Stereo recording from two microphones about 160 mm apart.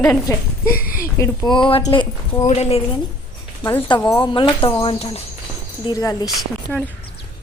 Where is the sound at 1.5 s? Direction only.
30° left (ahead or behind).